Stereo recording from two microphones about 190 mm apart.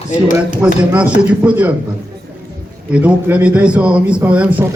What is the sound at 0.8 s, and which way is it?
Speech, 5° right (ahead or behind).